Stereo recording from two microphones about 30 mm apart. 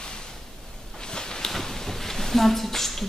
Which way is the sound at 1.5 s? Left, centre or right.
Centre.